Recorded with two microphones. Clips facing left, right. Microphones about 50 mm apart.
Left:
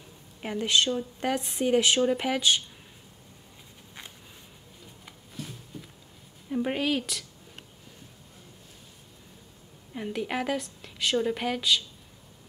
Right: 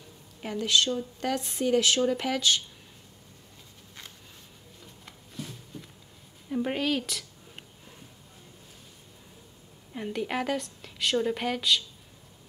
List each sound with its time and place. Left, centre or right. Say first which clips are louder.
0.4 s speech: left 1 dB; centre
5.0 s a sound: even; centre
6.5 s a woman's voice: left 1 dB; centre
9.9 s a woman's voice: even; centre